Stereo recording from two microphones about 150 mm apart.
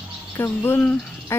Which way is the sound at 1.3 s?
15° left (ahead or behind).